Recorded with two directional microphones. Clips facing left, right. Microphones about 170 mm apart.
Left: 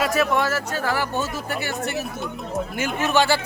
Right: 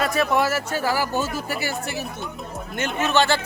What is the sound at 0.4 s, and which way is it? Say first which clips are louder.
Speech: right 1 dB; 10° right (ahead or behind).